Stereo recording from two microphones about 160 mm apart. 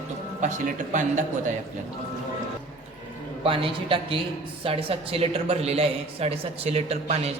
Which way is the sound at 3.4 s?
35° right (ahead or behind).